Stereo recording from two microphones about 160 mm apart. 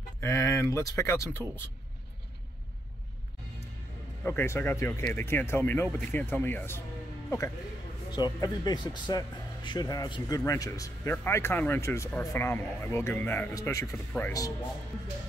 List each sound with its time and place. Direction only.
0.2 s speech: 15° left (ahead or behind)
4.2 s speech: 15° left (ahead or behind)
13.9 s speech: 10° left (ahead or behind)